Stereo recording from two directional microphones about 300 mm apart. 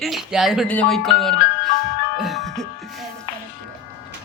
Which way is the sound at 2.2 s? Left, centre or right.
Centre.